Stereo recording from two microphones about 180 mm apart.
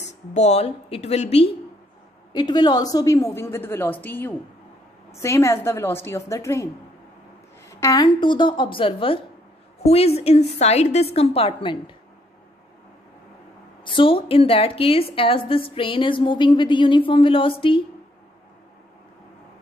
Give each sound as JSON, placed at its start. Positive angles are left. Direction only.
{"t": 0.0, "sound": "a woman's voice", "side_deg": 40}
{"t": 2.3, "sound": "a woman's voice", "side_deg": 25}
{"t": 7.8, "sound": "a woman's voice", "side_deg": 20}
{"t": 13.8, "sound": "a woman's voice", "side_deg": 30}